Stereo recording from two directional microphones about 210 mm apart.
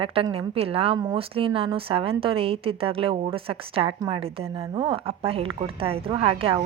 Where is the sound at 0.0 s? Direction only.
25° right (ahead or behind).